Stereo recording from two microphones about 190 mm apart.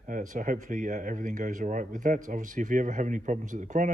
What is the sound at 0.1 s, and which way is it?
Speech, 45° right (ahead or behind).